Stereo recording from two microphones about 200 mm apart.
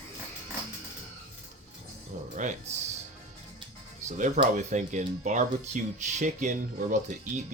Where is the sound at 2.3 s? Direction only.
40° right (ahead or behind).